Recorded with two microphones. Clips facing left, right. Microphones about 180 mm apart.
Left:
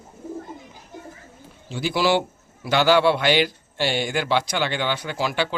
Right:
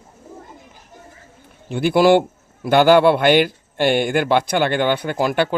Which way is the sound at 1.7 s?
55° right (ahead or behind).